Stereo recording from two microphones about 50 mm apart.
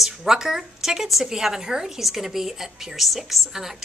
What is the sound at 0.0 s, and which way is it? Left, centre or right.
A woman's voice, centre.